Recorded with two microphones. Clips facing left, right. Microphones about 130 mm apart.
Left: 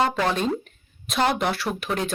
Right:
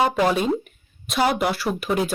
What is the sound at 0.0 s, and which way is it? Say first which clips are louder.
Speech: right 3 dB; 10° right (ahead or behind).